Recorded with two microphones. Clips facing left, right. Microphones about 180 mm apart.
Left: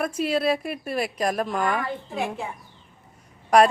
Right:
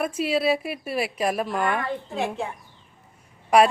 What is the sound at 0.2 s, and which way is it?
A woman's voice, 5° right (ahead or behind).